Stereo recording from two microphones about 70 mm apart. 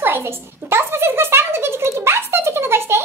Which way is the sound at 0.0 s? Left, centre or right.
Right.